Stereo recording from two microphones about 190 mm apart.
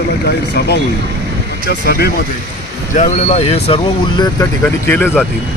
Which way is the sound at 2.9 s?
40° left (ahead or behind).